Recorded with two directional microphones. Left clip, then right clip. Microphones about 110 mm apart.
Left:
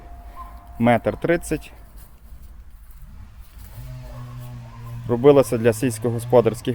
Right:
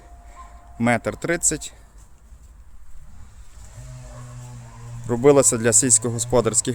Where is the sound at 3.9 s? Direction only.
40° right (ahead or behind).